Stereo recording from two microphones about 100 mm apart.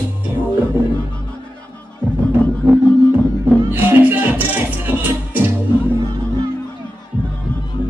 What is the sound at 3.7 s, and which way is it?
Music, 20° right (ahead or behind).